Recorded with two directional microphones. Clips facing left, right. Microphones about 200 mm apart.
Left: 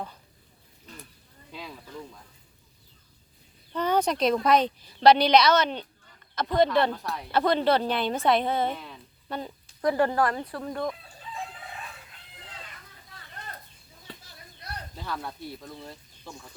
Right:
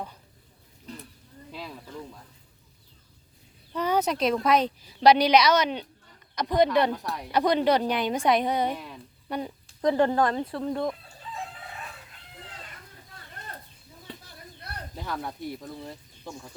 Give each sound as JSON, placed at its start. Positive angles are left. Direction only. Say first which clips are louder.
{"t": 1.5, "sound": "speech", "louder": "right 1 dB", "side_deg": 0}
{"t": 3.7, "sound": "speech", "louder": "even", "side_deg": -10}
{"t": 10.5, "sound": "speech", "louder": "right 3 dB", "side_deg": 0}
{"t": 14.9, "sound": "speech", "louder": "right 2 dB", "side_deg": -15}